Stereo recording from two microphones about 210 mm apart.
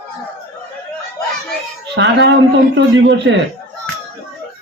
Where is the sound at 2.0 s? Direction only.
55° right (ahead or behind).